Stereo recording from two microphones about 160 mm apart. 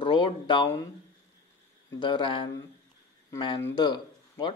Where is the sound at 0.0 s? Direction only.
30° left (ahead or behind).